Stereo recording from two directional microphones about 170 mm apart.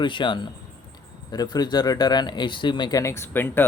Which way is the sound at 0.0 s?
30° left (ahead or behind).